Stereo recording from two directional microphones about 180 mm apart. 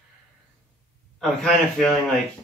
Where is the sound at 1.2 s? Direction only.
Centre (ahead or behind).